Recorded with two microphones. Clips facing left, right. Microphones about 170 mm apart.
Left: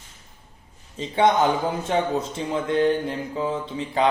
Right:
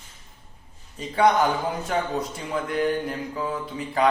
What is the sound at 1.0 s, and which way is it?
Speech, 25° left (ahead or behind).